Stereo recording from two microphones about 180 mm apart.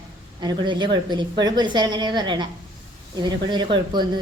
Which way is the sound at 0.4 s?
25° right (ahead or behind).